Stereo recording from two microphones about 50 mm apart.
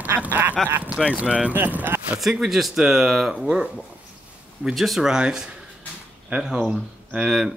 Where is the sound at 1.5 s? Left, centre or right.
Right.